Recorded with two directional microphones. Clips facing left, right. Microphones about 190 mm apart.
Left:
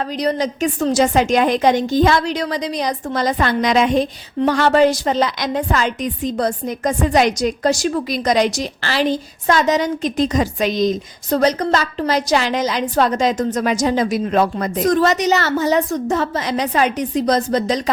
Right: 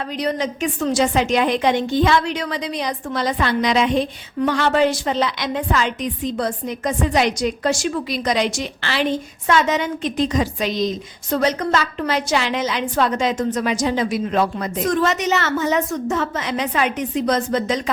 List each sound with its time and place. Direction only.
0.2 s a woman's voice: 40° left (ahead or behind)